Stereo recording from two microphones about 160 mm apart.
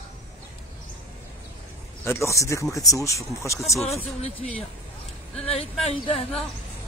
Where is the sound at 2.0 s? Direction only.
20° left (ahead or behind).